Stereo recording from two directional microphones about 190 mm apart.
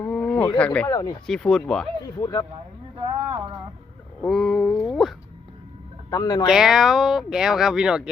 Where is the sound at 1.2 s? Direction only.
5° left (ahead or behind).